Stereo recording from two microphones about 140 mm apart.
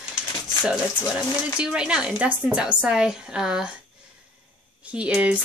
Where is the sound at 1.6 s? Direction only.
5° right (ahead or behind).